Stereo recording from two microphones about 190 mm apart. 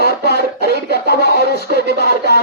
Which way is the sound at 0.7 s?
55° left (ahead or behind).